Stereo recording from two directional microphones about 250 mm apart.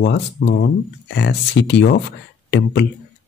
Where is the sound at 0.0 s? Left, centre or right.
Left.